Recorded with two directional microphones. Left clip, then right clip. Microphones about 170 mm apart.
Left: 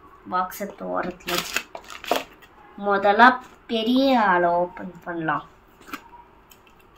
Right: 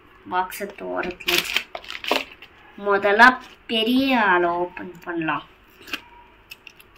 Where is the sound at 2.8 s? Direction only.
10° left (ahead or behind).